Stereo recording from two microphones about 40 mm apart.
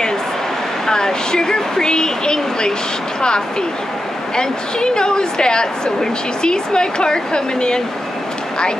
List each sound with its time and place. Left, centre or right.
0.8 s a woman's voice: centre